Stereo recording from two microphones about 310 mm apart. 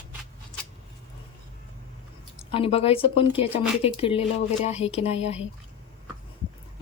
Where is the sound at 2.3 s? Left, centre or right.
Centre.